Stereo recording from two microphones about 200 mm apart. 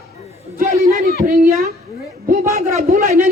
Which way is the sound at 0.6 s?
45° right (ahead or behind).